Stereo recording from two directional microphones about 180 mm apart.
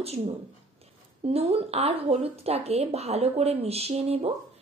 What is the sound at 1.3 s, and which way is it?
A woman's voice, 35° right (ahead or behind).